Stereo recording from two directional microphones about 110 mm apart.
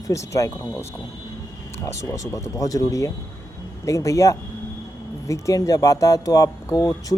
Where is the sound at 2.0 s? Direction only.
25° left (ahead or behind).